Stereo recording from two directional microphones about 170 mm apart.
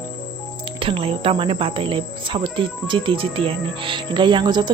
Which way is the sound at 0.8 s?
30° right (ahead or behind).